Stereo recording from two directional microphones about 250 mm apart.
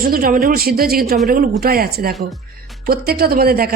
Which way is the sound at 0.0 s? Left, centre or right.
Right.